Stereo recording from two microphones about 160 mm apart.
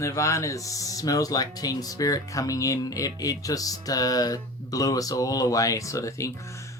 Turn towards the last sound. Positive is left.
turn(degrees=20)  # may be behind; listen again after turning